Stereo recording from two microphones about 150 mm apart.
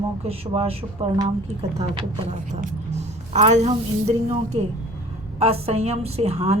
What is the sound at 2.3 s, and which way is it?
A woman's voice, 50° right (ahead or behind).